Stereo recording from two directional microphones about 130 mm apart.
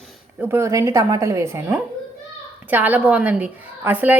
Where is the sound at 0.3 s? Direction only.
20° right (ahead or behind).